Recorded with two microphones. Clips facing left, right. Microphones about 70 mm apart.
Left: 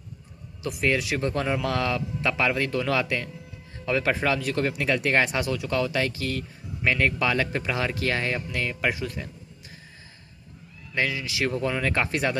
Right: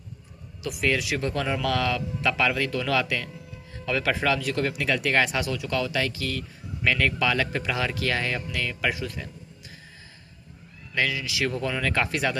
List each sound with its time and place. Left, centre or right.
0.6 s speech: left
10.9 s speech: left